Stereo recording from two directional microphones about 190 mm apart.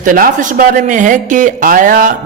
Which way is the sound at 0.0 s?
45° right (ahead or behind).